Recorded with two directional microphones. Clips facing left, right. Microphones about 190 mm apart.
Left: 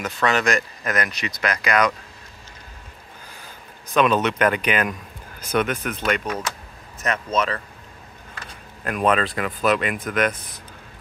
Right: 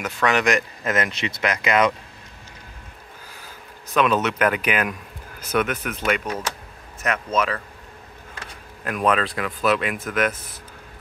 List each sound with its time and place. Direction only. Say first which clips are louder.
0.0 s speech: right 1 dB; 15° right (ahead or behind)
3.9 s speech: left 1 dB; 5° right (ahead or behind)
8.8 s speech: left 1 dB; centre (ahead or behind)